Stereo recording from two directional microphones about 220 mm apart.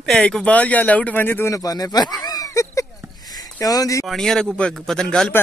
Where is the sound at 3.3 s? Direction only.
15° left (ahead or behind).